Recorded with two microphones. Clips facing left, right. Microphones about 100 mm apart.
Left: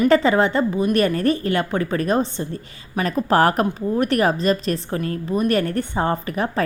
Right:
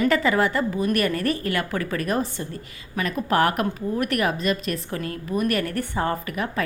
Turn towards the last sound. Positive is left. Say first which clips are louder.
# left 4 dB
turn(degrees=30)  # may be behind; listen again after turning